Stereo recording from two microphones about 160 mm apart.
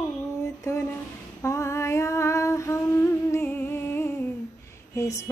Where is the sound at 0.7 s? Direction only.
20° left (ahead or behind).